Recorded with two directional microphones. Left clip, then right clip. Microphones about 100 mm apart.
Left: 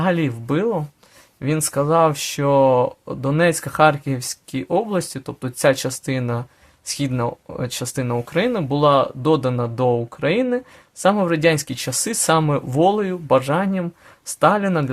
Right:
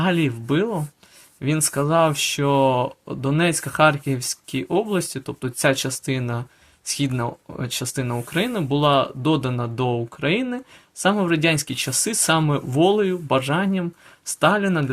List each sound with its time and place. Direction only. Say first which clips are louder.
0.0 s speech: left 1 dB; 30° left (ahead or behind)